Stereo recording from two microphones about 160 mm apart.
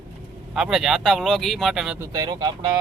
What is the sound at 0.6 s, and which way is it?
Speech, 5° right (ahead or behind).